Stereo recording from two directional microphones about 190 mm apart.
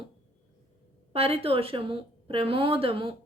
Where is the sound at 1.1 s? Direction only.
30° right (ahead or behind).